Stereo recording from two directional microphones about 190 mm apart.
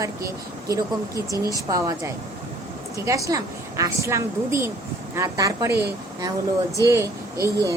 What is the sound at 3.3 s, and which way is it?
A woman's voice, 15° right (ahead or behind).